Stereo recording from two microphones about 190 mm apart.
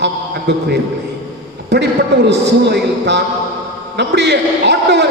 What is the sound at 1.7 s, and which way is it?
A man's voice, 65° right (ahead or behind).